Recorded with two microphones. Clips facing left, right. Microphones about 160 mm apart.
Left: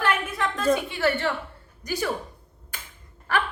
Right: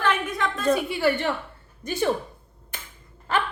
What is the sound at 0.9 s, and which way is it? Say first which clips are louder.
Speech: right 1 dB; 15° right (ahead or behind).